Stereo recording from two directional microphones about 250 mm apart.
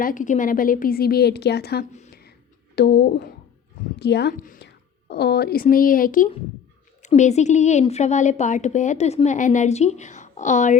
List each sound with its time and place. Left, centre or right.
0.0 s a woman's voice: left
1.9 s a sound: left
2.7 s a woman's voice: left